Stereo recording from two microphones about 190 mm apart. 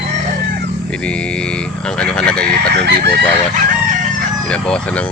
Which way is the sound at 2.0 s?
5° left (ahead or behind).